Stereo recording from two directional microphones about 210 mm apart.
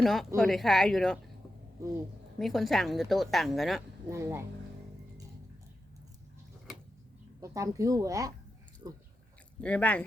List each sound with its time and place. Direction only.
0.0 s a woman's voice: centre (ahead or behind)
2.4 s a woman's voice: centre (ahead or behind)
4.1 s speech: 15° right (ahead or behind)
7.4 s speech: 15° right (ahead or behind)
9.6 s speech: 5° left (ahead or behind)